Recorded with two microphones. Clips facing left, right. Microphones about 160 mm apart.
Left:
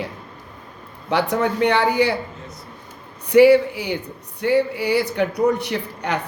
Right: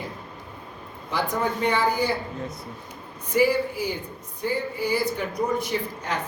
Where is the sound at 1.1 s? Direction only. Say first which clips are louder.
Left 6 dB; 70° left (ahead or behind).